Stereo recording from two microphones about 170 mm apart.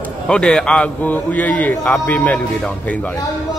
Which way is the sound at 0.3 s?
5° left (ahead or behind).